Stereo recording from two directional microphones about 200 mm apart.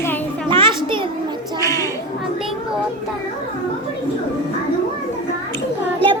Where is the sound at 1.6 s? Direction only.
15° left (ahead or behind).